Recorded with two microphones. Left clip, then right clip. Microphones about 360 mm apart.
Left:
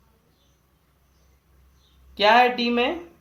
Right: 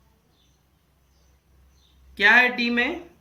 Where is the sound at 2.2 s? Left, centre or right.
Centre.